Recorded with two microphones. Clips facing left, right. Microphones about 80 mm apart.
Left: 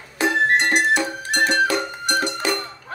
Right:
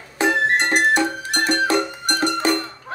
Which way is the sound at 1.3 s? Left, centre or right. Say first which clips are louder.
Left 1 dB; right.